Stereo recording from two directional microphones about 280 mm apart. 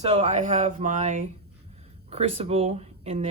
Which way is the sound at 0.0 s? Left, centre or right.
Right.